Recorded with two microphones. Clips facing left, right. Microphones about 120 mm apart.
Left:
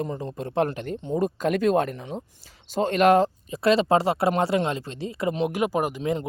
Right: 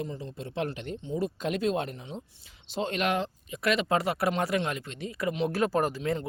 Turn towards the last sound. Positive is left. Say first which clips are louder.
# left 2 dB
turn(degrees=15)  # may be behind; listen again after turning